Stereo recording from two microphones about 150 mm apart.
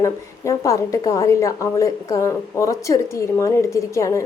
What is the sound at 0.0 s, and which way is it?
A woman's voice, 20° left (ahead or behind).